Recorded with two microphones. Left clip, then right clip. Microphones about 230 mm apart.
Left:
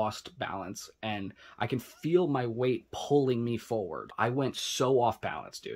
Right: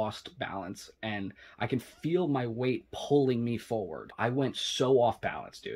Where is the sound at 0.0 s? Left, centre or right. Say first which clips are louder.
Left 2 dB; centre.